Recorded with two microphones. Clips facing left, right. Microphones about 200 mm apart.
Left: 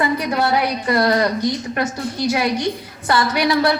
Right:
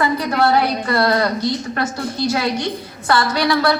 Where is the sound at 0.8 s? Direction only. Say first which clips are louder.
Even; 15° left (ahead or behind).